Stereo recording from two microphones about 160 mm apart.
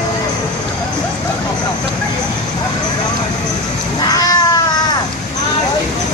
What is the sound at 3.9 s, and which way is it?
Cat, 25° left (ahead or behind).